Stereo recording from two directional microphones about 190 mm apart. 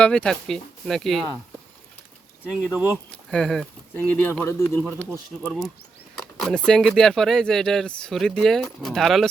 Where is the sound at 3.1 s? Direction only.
5° left (ahead or behind).